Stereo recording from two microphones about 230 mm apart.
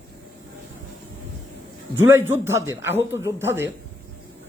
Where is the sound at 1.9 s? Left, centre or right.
Centre.